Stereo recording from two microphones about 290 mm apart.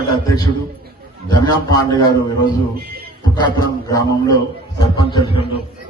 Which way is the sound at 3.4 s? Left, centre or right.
Centre.